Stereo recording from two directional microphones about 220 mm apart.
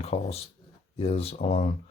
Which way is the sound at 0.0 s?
25° left (ahead or behind).